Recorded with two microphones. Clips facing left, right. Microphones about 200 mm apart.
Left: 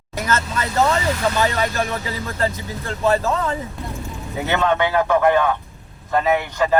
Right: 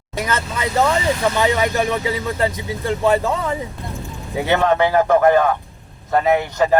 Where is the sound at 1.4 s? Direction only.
15° right (ahead or behind).